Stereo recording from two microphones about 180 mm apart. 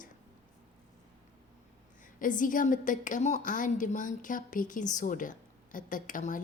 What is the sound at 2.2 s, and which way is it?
A woman's voice, 45° left (ahead or behind).